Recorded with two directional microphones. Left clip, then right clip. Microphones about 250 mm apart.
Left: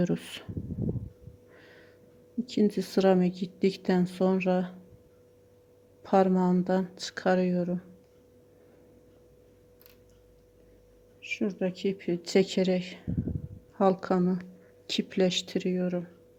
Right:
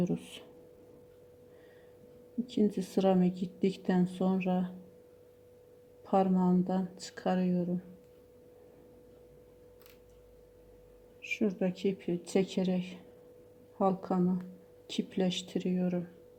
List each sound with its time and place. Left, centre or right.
0.0 s speech: left
2.5 s speech: centre
6.0 s speech: centre
11.2 s speech: centre